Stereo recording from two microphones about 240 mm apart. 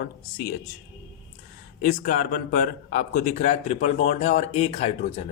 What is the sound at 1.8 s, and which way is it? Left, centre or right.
A man's voice, left.